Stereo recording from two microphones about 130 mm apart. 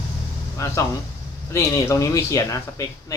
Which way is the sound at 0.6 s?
25° left (ahead or behind).